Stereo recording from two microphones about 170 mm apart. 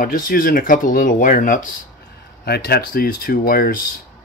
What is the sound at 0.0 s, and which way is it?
Speech, 55° left (ahead or behind).